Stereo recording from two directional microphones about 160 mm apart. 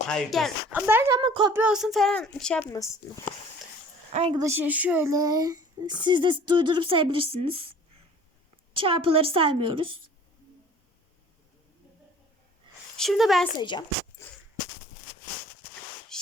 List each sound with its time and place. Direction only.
0.1 s speech: centre (ahead or behind)
0.7 s speech: 10° right (ahead or behind)
1.2 s a woman's voice: 30° right (ahead or behind)
1.5 s speech: 5° right (ahead or behind)
2.6 s speech: 20° left (ahead or behind)
4.1 s a woman's voice: 35° right (ahead or behind)
4.4 s a child's voice: 15° right (ahead or behind); by 7.7 s 35° right (ahead or behind)
8.7 s a woman's voice: 35° right (ahead or behind)
13.0 s speech: centre (ahead or behind)
13.6 s speech: 30° left (ahead or behind)
14.2 s a sound: 20° left (ahead or behind)
16.1 s a sound: 5° left (ahead or behind)